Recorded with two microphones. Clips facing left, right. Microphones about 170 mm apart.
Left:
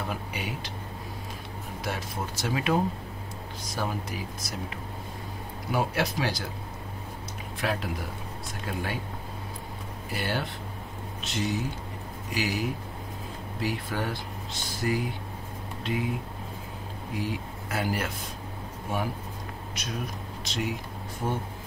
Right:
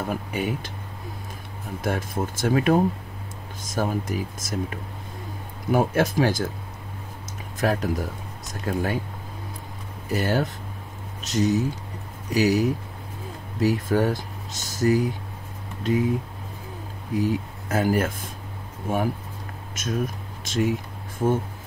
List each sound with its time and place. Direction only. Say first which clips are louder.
0.1 s speech: right 7 dB; 50° right (ahead or behind)
1.8 s speech: right 7 dB; 50° right (ahead or behind)
7.6 s speech: right 7 dB; 45° right (ahead or behind)
10.1 s speech: right 8 dB; 40° right (ahead or behind)
17.2 s speech: right 9 dB; 45° right (ahead or behind)